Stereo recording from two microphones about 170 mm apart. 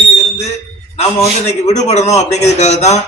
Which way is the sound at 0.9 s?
40° left (ahead or behind).